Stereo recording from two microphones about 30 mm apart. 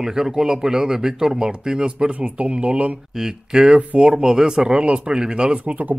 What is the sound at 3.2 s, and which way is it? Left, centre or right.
Speech, right.